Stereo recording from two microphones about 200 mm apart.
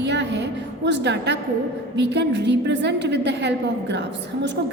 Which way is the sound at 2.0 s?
60° right (ahead or behind).